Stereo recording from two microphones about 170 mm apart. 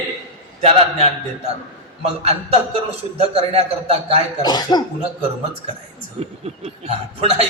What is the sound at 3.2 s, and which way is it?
Music, 35° right (ahead or behind).